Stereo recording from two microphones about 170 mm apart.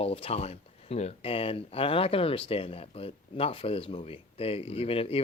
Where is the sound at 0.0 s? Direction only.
35° left (ahead or behind).